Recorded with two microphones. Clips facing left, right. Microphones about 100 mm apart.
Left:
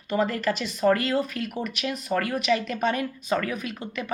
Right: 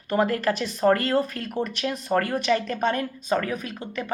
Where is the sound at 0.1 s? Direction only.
50° right (ahead or behind).